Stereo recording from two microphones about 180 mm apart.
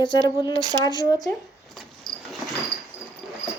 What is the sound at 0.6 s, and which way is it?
Speech, 20° right (ahead or behind).